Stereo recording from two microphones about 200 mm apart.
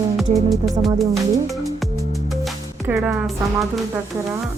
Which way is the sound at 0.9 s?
Centre (ahead or behind).